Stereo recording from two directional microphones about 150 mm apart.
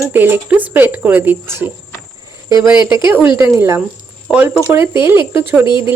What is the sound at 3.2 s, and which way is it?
Speech, 15° right (ahead or behind).